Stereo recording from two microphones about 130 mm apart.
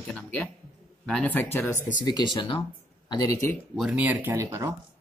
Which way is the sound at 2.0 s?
35° left (ahead or behind).